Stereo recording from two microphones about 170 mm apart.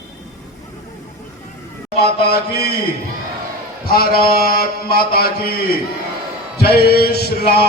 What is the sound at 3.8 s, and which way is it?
Mantra, 60° left (ahead or behind).